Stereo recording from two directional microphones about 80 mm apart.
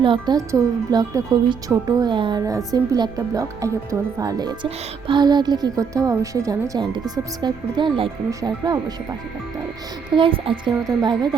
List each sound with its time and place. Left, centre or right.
0.0 s a woman's voice: right
0.3 s speech: right
2.0 s speech: right
2.4 s speech: right
4.2 s speech: right
6.7 s speech: right
8.4 s speech: right
10.2 s a woman's voice: right
10.7 s speech: right